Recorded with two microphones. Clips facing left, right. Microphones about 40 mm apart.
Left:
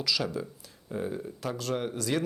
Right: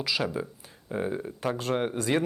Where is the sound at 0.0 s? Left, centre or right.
Right.